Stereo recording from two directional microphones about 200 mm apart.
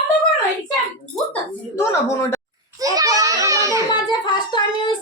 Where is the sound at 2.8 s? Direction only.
15° right (ahead or behind).